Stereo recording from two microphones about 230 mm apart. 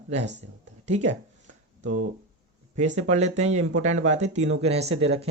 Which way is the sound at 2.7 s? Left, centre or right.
Right.